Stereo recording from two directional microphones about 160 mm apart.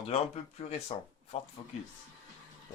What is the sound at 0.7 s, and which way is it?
Speech, 40° left (ahead or behind).